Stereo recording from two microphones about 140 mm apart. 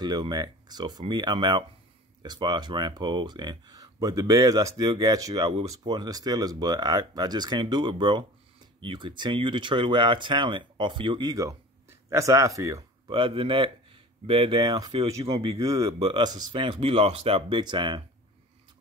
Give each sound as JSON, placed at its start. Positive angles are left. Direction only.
{"t": 0.0, "sound": "speech", "side_deg": -30}
{"t": 13.1, "sound": "speech", "side_deg": -40}